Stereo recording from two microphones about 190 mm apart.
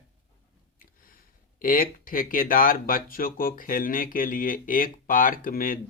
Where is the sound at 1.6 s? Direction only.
50° left (ahead or behind).